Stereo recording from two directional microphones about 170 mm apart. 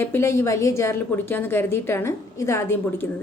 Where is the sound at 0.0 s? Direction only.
15° left (ahead or behind).